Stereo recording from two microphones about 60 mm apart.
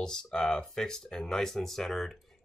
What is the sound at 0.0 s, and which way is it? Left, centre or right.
Speech, centre.